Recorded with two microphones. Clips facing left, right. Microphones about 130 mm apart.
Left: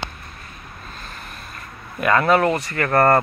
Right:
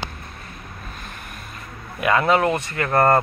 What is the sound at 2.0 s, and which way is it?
Speech, 10° right (ahead or behind).